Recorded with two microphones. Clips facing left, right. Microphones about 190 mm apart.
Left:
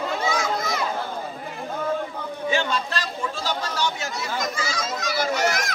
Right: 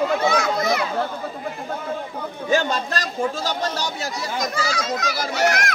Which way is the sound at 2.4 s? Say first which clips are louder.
Right 4 dB; 40° right (ahead or behind).